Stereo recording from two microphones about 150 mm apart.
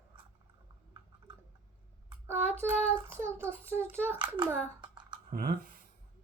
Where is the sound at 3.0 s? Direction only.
15° right (ahead or behind).